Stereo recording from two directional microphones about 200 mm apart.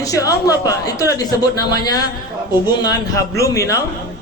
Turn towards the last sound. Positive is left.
turn(degrees=15)  # may be behind; listen again after turning